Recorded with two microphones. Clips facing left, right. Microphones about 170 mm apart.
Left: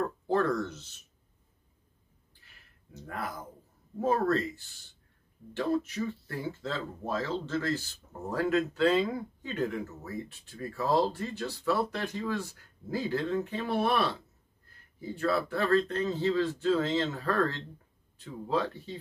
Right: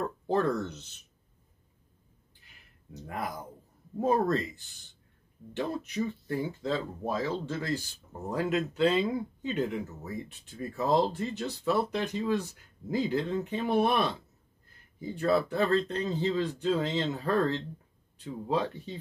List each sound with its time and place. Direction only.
0.3 s speech: 20° right (ahead or behind)
2.4 s a sound: 15° right (ahead or behind)
4.0 s speech: 15° right (ahead or behind)